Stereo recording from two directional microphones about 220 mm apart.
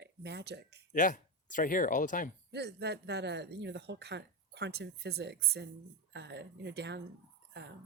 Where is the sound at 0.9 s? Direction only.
35° left (ahead or behind).